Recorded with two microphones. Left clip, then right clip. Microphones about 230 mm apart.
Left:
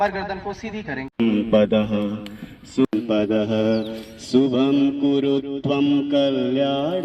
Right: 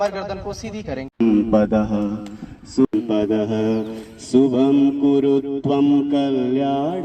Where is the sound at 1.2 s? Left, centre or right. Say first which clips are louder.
Right 1 dB; left.